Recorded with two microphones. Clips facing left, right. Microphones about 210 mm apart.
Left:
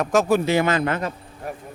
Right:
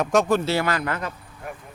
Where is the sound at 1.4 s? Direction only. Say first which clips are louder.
Left 4 dB; 35° left (ahead or behind).